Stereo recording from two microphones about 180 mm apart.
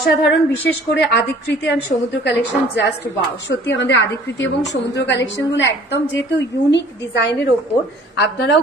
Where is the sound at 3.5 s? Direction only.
75° left (ahead or behind).